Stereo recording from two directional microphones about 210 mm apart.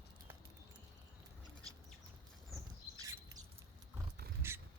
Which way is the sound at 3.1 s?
15° right (ahead or behind).